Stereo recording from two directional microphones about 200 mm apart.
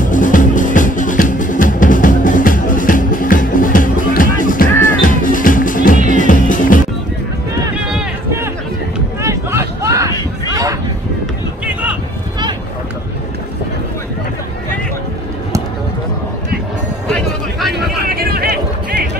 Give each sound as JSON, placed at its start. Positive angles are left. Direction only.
{"t": 0.0, "sound": "music", "side_deg": 40}
{"t": 7.7, "sound": "run", "side_deg": -5}
{"t": 9.2, "sound": "vehicle", "side_deg": -15}
{"t": 10.5, "sound": "a sound", "side_deg": -15}
{"t": 11.6, "sound": "vehicle", "side_deg": -5}
{"t": 17.1, "sound": "music", "side_deg": 0}
{"t": 18.0, "sound": "a sound", "side_deg": -50}